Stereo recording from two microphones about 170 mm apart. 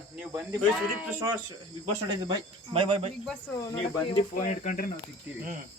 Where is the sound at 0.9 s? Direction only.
10° right (ahead or behind).